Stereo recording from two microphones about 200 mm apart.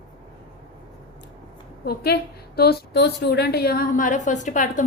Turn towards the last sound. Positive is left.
turn(degrees=40)  # may be behind; listen again after turning